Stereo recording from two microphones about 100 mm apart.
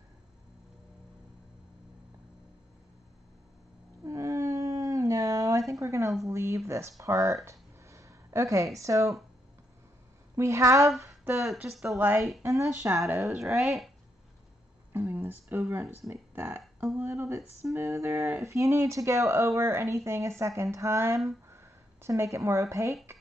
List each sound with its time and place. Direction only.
4.0 s cat: 30° right (ahead or behind)
6.2 s speech: 30° right (ahead or behind)
10.3 s speech: 30° right (ahead or behind)
11.5 s speech: 5° right (ahead or behind)
12.4 s speech: 30° right (ahead or behind)
13.5 s speech: 5° right (ahead or behind)
14.9 s speech: 20° right (ahead or behind)